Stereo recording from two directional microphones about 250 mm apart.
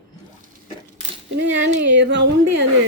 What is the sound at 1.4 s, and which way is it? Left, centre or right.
Speech, right.